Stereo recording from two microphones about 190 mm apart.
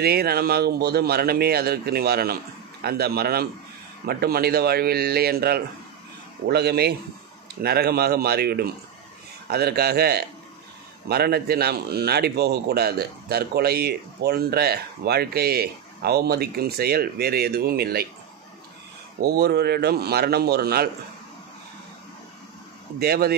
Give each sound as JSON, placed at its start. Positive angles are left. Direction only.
{"t": 0.0, "sound": "a man's voice", "side_deg": -55}
{"t": 19.2, "sound": "a man's voice", "side_deg": -60}
{"t": 22.9, "sound": "a man's voice", "side_deg": -55}